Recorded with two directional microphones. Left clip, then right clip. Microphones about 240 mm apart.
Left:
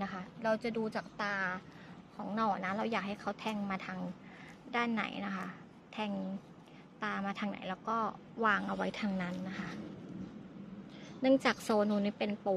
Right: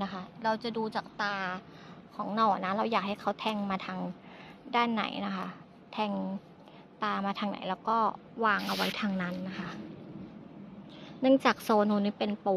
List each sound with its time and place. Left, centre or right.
0.0 s a sound: centre
0.7 s a woman's voice: centre
11.2 s a woman's voice: centre